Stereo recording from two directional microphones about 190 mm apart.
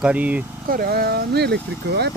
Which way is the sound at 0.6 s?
50° right (ahead or behind).